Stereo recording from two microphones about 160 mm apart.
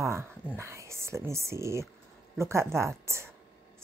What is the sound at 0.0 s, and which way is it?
A woman's voice, 15° right (ahead or behind).